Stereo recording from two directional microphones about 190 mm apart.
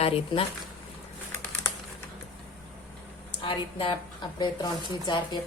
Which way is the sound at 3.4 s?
25° left (ahead or behind).